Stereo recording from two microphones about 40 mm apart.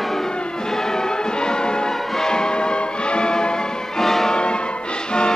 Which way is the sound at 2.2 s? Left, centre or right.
Centre.